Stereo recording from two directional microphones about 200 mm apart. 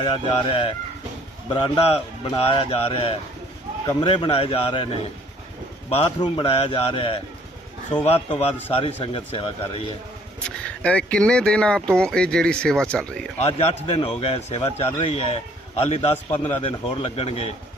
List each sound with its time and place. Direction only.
0.0 s a man's voice: 20° left (ahead or behind)
5.9 s a man's voice: 25° left (ahead or behind)
10.4 s speech: 5° left (ahead or behind)
13.4 s a man's voice: 35° left (ahead or behind)